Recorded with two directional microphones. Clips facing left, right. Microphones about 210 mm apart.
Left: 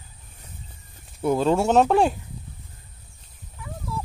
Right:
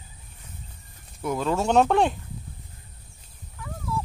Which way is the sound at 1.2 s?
30° left (ahead or behind).